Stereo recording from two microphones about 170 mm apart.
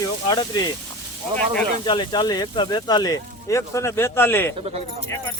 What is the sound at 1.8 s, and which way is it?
Speech, 25° left (ahead or behind).